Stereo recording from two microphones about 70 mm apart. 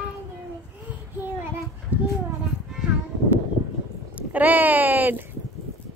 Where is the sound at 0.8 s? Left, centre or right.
Right.